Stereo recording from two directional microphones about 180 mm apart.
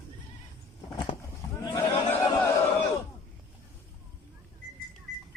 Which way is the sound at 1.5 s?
25° left (ahead or behind).